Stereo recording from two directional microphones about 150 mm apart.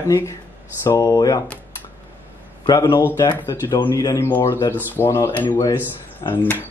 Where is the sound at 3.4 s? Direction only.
25° left (ahead or behind).